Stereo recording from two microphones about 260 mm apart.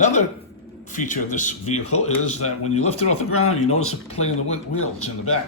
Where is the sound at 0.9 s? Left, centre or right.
Left.